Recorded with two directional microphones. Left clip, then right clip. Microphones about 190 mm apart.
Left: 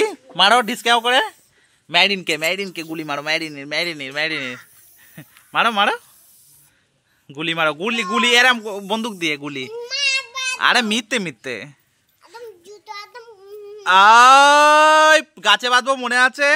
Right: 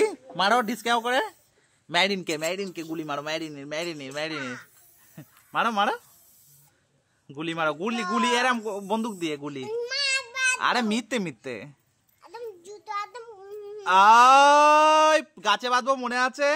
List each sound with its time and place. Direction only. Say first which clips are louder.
0.0 s a man's voice: left 8 dB; 10° left (ahead or behind)
7.2 s a man's voice: left 7 dB; 20° left (ahead or behind)
9.7 s cat: left 5 dB; 25° right (ahead or behind)
10.6 s a man's voice: left 8 dB; 10° left (ahead or behind)
12.6 s child singing: right 2 dB; 15° right (ahead or behind)
13.8 s a man's voice: left 6 dB; 10° left (ahead or behind)